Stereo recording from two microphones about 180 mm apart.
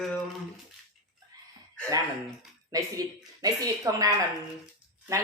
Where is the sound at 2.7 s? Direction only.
20° right (ahead or behind).